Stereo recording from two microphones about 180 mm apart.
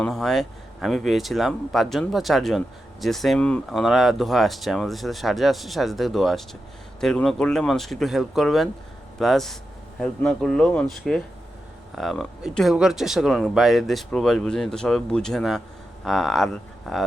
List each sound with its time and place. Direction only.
0.0 s speech: centre (ahead or behind)